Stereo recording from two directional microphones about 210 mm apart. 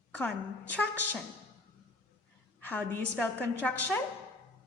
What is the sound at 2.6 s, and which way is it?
A woman's voice, 10° left (ahead or behind).